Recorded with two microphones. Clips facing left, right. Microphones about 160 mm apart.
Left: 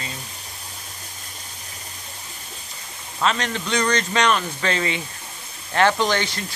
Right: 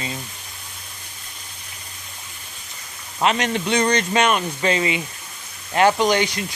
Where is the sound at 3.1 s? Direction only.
20° right (ahead or behind).